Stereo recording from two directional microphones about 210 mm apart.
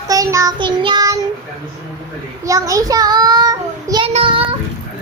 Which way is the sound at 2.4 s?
15° right (ahead or behind).